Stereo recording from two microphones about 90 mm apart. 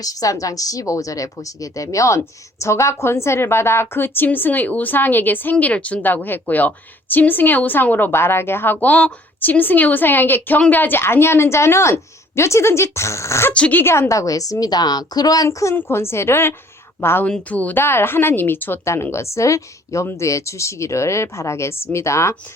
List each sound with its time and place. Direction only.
0.0 s speech: 40° left (ahead or behind)
13.5 s speech: 15° left (ahead or behind); by 15.4 s 45° left (ahead or behind)
15.4 s speech: 35° left (ahead or behind)
17.2 s speech: 15° left (ahead or behind); by 22.4 s 30° left (ahead or behind)